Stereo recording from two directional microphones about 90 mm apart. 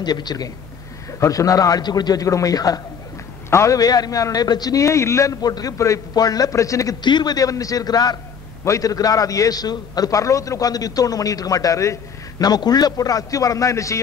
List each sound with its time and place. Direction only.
0.0 s a man's voice: 50° left (ahead or behind)
3.4 s a man's voice: 35° left (ahead or behind)
7.0 s a man's voice: 55° left (ahead or behind); by 13.9 s 35° left (ahead or behind)